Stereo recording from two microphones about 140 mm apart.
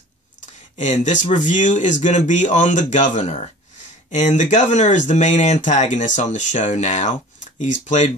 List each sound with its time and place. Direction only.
0.7 s speech: 60° left (ahead or behind)